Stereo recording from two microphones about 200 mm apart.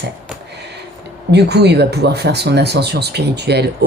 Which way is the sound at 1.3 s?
55° right (ahead or behind).